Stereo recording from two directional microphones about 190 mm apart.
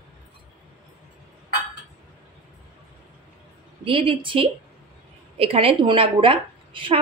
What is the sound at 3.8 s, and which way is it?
A woman's voice, 25° right (ahead or behind).